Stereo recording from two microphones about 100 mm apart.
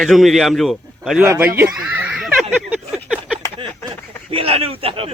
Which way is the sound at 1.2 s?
20° right (ahead or behind).